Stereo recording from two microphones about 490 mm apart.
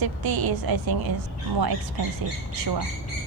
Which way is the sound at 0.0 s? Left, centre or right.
Right.